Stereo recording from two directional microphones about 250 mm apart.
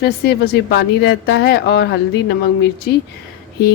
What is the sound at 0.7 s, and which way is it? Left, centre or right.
Speech, left.